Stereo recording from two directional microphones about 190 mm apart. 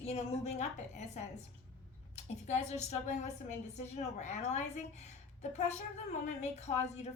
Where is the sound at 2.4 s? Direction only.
35° left (ahead or behind).